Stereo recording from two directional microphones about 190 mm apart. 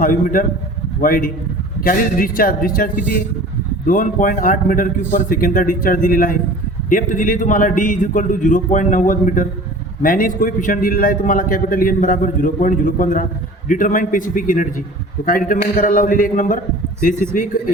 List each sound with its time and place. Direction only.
0.0 s a man's voice: 45° left (ahead or behind)